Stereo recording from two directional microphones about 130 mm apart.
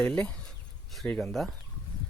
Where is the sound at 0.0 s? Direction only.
10° left (ahead or behind).